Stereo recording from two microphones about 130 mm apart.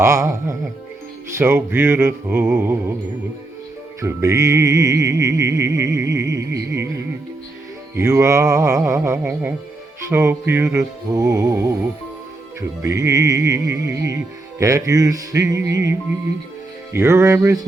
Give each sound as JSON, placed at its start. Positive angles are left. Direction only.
{"t": 0.0, "sound": "music", "side_deg": -20}
{"t": 4.0, "sound": "music", "side_deg": -25}
{"t": 7.9, "sound": "music", "side_deg": -20}